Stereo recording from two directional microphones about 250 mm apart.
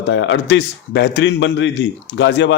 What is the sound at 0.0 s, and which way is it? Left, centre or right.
A man's voice, left.